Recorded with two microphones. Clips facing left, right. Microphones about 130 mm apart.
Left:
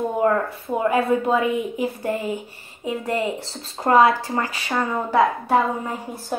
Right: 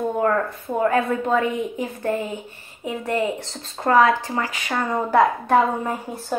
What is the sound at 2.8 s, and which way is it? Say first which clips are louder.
Speech: even; 30° left (ahead or behind).